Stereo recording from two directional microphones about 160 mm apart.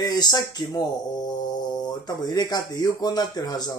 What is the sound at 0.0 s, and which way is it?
Speech, 25° left (ahead or behind).